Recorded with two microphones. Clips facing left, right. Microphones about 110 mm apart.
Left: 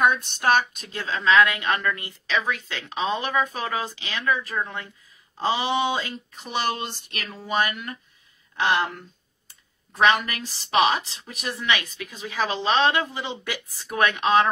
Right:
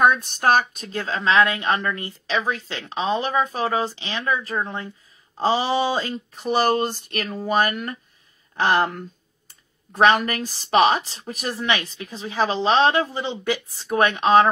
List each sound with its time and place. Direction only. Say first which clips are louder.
0.0 s speech: right 3 dB; 45° right (ahead or behind)